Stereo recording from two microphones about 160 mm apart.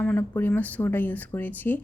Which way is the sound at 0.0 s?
10° left (ahead or behind).